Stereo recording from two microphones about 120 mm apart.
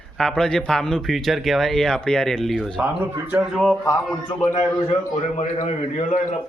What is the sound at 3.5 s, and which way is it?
Speech, 5° left (ahead or behind).